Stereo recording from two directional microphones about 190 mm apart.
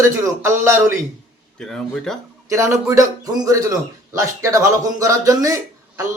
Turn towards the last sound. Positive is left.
turn(degrees=-15)  # may be behind; listen again after turning